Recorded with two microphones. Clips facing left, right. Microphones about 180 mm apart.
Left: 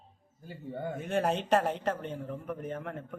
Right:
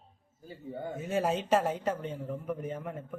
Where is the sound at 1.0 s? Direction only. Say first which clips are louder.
Even; 5° right (ahead or behind).